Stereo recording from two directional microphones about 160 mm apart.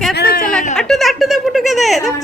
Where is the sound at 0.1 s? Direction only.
80° left.